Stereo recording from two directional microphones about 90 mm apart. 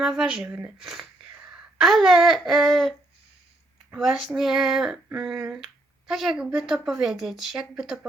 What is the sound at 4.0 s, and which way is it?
Speech, 5° right (ahead or behind).